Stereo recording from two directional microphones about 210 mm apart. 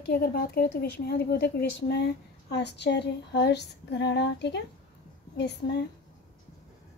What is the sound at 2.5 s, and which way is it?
Female singing, 55° left (ahead or behind).